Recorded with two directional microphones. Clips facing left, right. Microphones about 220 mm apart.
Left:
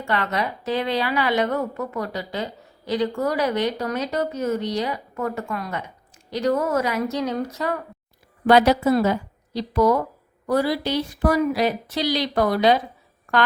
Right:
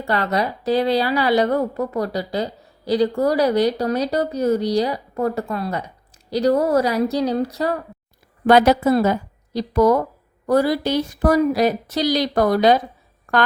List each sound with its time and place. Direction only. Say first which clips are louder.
0.0 s a woman's voice: right 4 dB; 35° right (ahead or behind)
8.4 s a woman's voice: right 2 dB; 50° right (ahead or behind)